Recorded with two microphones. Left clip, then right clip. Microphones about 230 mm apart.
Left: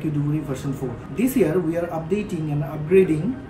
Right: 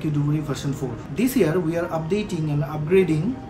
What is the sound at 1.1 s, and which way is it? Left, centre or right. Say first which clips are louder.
A man's voice: left 1 dB; centre.